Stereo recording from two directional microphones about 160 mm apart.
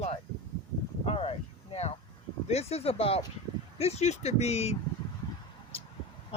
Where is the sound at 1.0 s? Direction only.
40° left (ahead or behind).